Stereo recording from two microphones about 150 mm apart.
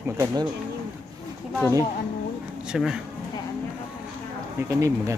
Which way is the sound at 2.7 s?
5° right (ahead or behind).